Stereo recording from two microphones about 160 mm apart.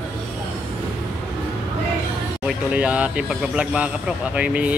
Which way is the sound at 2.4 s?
5° right (ahead or behind).